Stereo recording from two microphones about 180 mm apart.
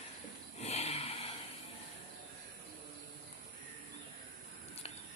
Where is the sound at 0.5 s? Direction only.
35° left (ahead or behind).